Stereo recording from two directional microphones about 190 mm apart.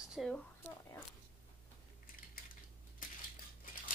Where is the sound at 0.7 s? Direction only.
15° left (ahead or behind).